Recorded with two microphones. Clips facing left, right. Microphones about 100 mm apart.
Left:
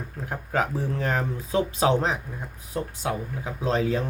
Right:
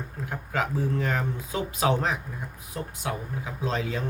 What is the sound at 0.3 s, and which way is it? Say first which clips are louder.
Speech: left 3 dB; 35° left (ahead or behind).